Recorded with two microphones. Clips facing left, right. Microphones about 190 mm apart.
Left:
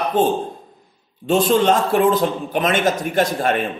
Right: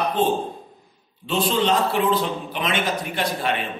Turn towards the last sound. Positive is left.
turn(degrees=45)  # may be behind; listen again after turning